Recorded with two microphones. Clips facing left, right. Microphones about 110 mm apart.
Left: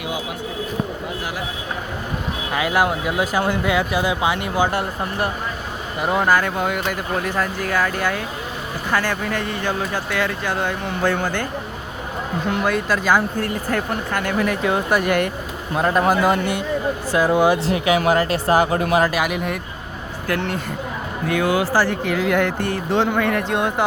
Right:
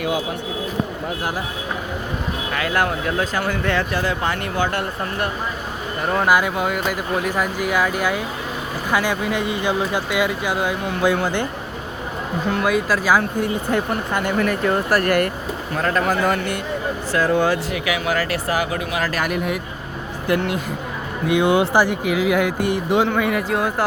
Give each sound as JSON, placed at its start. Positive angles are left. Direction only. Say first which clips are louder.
{"t": 2.5, "sound": "speech", "louder": "left 2 dB", "side_deg": 15}
{"t": 6.0, "sound": "speech", "louder": "left 1 dB", "side_deg": 5}
{"t": 6.2, "sound": "speech", "louder": "right 3 dB", "side_deg": -10}
{"t": 12.5, "sound": "speech", "louder": "right 1 dB", "side_deg": 0}
{"t": 13.4, "sound": "speech", "louder": "right 2 dB", "side_deg": -15}
{"t": 14.3, "sound": "speech", "louder": "even", "side_deg": 0}
{"t": 15.7, "sound": "speech", "louder": "left 3 dB", "side_deg": 15}
{"t": 17.7, "sound": "speech", "louder": "left 5 dB", "side_deg": 30}
{"t": 19.1, "sound": "speech", "louder": "even", "side_deg": 5}
{"t": 21.2, "sound": "speech", "louder": "right 3 dB", "side_deg": -20}